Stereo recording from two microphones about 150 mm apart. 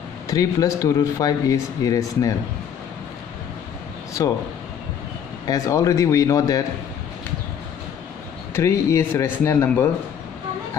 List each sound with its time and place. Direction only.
0.3 s speech: 25° left (ahead or behind)
5.5 s speech: 20° left (ahead or behind)
8.5 s speech: 20° left (ahead or behind)